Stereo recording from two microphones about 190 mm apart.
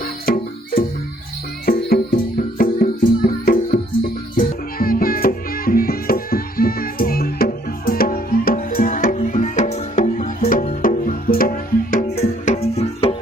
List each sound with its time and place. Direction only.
0.3 s music: 50° left (ahead or behind); by 13.1 s 30° left (ahead or behind)